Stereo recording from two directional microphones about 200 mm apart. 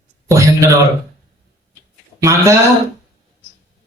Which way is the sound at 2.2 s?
15° right (ahead or behind).